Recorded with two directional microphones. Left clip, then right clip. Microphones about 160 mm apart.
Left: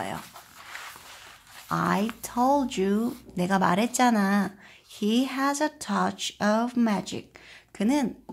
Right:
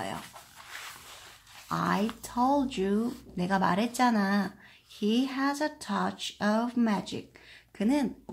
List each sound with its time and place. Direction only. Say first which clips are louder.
1.7 s speech: left 3 dB; 25° left (ahead or behind)